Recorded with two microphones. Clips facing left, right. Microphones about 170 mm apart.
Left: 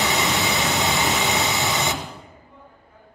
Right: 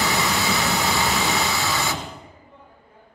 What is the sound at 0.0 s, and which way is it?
Vehicle, 20° left (ahead or behind).